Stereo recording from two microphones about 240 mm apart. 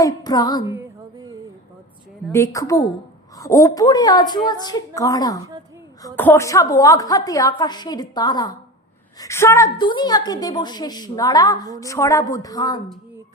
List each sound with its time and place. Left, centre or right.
0.0 s a woman's voice: centre
0.7 s music: centre
2.3 s a woman's voice: centre